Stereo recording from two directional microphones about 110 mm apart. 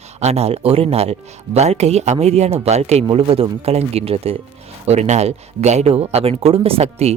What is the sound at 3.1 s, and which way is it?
Speech, 55° right (ahead or behind).